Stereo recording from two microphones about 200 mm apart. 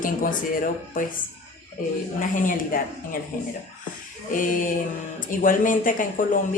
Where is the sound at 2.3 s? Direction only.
45° left (ahead or behind).